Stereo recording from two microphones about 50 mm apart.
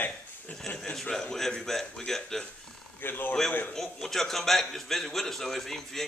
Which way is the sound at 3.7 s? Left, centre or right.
Centre.